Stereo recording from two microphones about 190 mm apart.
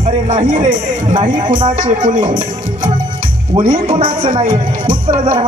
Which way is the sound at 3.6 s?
40° right (ahead or behind).